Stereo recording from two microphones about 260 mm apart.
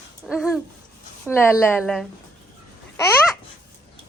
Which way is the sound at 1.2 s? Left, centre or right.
Centre.